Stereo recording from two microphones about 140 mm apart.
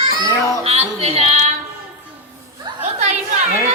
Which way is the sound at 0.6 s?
45° right (ahead or behind).